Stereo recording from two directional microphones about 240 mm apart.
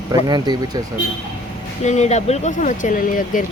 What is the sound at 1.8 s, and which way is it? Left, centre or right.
Speech, left.